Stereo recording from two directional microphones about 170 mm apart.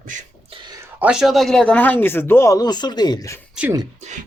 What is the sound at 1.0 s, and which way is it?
Speech, 5° right (ahead or behind).